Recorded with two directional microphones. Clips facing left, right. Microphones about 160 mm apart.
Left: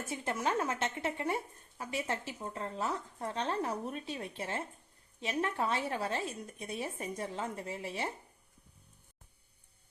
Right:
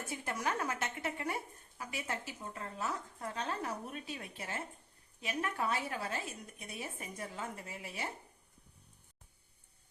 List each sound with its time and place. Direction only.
0.1 s a woman's voice: 25° left (ahead or behind)